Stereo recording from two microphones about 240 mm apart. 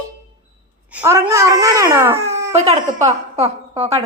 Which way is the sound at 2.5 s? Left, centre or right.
Right.